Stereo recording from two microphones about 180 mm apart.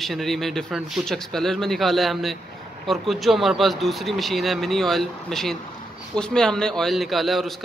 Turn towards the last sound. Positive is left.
turn(degrees=0)  # may be behind; listen again after turning